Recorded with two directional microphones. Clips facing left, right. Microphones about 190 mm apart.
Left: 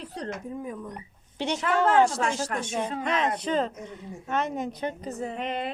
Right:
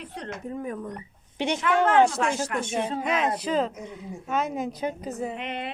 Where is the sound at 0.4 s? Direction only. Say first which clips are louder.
Right 3 dB; 70° right (ahead or behind).